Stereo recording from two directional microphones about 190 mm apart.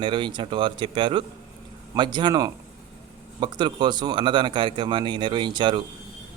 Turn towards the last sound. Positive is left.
turn(degrees=-25)  # may be behind; listen again after turning